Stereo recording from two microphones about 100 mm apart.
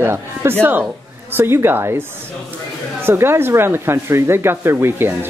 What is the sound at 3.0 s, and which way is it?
Speech, 25° right (ahead or behind).